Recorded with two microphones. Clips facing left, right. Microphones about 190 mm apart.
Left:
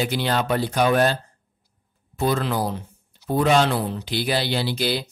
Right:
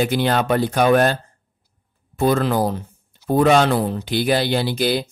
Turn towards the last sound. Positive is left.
turn(degrees=-50)  # may be behind; listen again after turning